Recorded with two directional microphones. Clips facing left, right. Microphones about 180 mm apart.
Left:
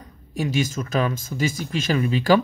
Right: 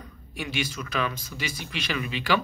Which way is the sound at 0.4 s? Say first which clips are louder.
Left 8 dB; 40° left (ahead or behind).